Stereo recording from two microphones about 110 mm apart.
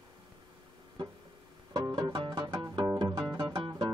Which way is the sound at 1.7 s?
45° right (ahead or behind).